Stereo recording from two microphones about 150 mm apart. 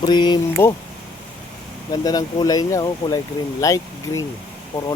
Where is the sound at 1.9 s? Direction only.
25° left (ahead or behind).